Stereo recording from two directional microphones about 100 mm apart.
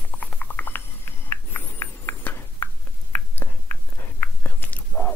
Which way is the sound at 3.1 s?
20° left (ahead or behind).